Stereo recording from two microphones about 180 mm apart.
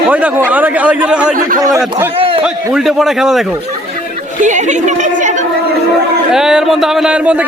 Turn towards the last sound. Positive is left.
turn(degrees=-5)  # may be behind; listen again after turning